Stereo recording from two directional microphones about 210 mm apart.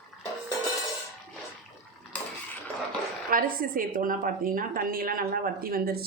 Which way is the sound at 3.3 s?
40° right (ahead or behind).